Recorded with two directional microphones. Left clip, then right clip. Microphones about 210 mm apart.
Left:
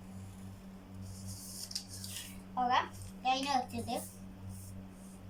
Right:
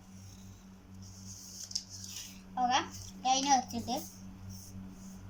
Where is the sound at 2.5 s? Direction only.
20° left (ahead or behind).